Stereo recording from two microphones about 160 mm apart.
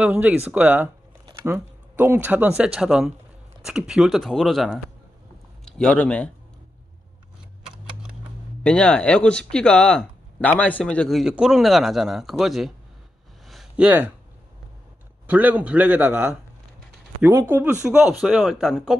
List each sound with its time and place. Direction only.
0.0 s a man's voice: 10° right (ahead or behind); by 6.3 s 5° left (ahead or behind)
8.6 s speech: 5° left (ahead or behind)
13.5 s a sound: 5° right (ahead or behind)
15.2 s a man's voice: 10° right (ahead or behind)
17.8 s speech: 5° right (ahead or behind)